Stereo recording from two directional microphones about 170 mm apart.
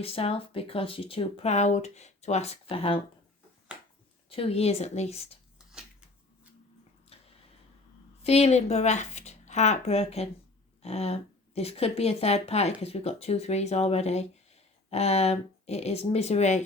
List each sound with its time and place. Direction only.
0.0 s speech: 35° left (ahead or behind)
4.3 s speech: 35° left (ahead or behind)
7.1 s a sound: 35° left (ahead or behind)
8.2 s speech: 35° left (ahead or behind)